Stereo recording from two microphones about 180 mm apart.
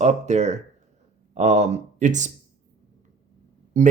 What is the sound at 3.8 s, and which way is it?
Speech, 40° right (ahead or behind).